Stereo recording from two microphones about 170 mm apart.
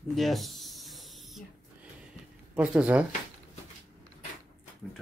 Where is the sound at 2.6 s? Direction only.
10° right (ahead or behind).